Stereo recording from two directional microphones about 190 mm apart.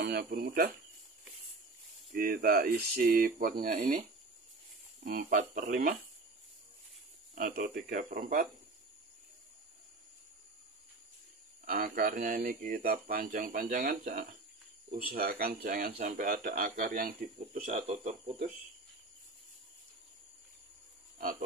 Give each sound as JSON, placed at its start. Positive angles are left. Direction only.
{"t": 0.0, "sound": "speech", "side_deg": -55}
{"t": 2.1, "sound": "speech", "side_deg": -50}
{"t": 5.0, "sound": "speech", "side_deg": -55}
{"t": 7.3, "sound": "speech", "side_deg": -50}
{"t": 11.6, "sound": "speech", "side_deg": -50}
{"t": 17.6, "sound": "speech", "side_deg": -35}
{"t": 21.2, "sound": "music", "side_deg": -50}